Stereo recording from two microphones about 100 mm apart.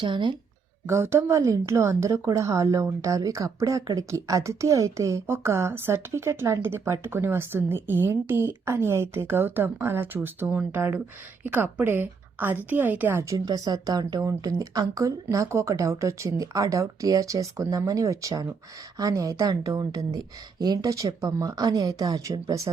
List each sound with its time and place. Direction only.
0.0 s speech: 55° right (ahead or behind)
0.9 s a woman's voice: 25° right (ahead or behind)
13.2 s speech: 35° right (ahead or behind)